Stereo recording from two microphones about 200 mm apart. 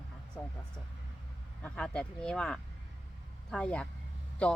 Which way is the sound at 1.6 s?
5° left (ahead or behind).